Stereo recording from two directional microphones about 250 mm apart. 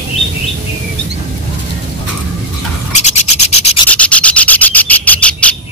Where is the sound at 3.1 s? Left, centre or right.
Left.